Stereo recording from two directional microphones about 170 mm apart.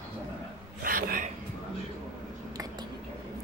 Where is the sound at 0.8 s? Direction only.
60° right (ahead or behind).